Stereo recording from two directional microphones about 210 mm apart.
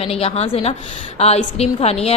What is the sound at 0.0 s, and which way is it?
A woman's voice, 30° left (ahead or behind).